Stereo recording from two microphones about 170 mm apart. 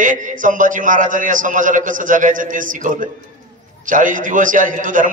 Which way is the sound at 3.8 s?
50° right (ahead or behind).